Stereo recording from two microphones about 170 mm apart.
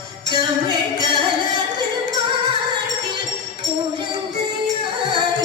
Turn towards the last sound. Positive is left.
turn(degrees=-25)  # may be behind; listen again after turning